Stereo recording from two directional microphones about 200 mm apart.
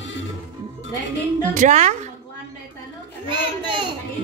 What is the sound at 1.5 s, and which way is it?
Speech, 40° right (ahead or behind).